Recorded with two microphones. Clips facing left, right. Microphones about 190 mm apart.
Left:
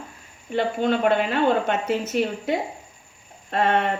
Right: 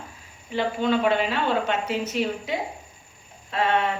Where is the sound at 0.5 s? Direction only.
50° left (ahead or behind).